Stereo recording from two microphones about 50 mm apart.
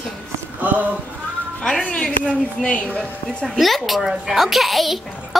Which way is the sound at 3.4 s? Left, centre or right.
Centre.